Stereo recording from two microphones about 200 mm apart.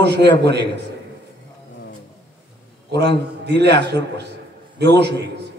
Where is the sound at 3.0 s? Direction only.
55° right (ahead or behind).